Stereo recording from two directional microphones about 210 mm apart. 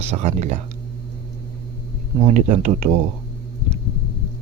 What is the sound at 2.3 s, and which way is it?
Speech, 35° right (ahead or behind).